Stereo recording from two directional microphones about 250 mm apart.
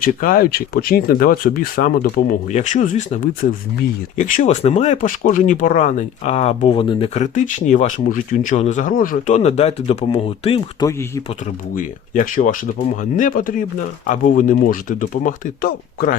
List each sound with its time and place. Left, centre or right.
0.0 s speech: left; by 11.2 s centre
11.8 s speech: left